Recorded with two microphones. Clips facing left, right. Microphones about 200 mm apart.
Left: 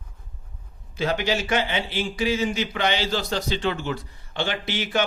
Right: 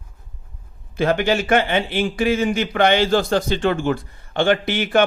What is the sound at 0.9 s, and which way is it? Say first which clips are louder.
A man's voice: right 6 dB; 55° right (ahead or behind).